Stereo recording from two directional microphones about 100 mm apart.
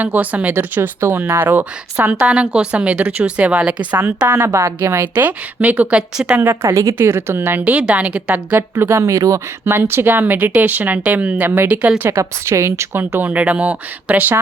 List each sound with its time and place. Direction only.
0.0 s speech: 15° right (ahead or behind)
6.3 s speech: 20° right (ahead or behind)
8.7 s speech: 25° right (ahead or behind)